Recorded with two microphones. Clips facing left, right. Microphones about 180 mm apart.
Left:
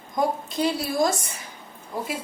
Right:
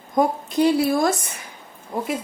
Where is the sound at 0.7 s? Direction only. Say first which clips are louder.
Right 4 dB; 60° right (ahead or behind).